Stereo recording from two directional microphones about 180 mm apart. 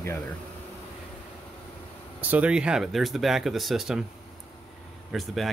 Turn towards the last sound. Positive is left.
turn(degrees=0)  # may be behind; listen again after turning